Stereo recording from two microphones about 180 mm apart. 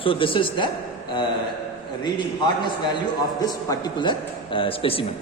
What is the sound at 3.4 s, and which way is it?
A man's voice, 20° left (ahead or behind).